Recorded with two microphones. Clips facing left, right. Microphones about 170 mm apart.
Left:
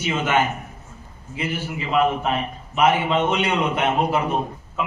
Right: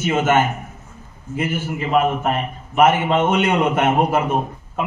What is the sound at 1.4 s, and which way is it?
A man's voice, 50° right (ahead or behind).